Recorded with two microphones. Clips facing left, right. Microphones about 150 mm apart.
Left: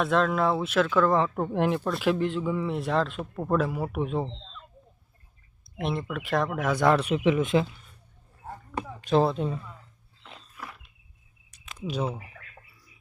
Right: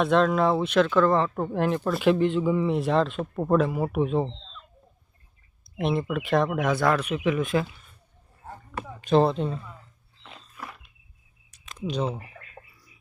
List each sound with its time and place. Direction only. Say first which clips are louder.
0.0 s speech: right 3 dB; centre (ahead or behind)
1.8 s speech: right 4 dB; centre (ahead or behind)
5.7 s speech: right 4 dB; centre (ahead or behind)
6.7 s speech: left 1 dB; 25° left (ahead or behind)
9.0 s speech: right 2 dB; centre (ahead or behind)
11.9 s speech: right 2 dB; 5° left (ahead or behind)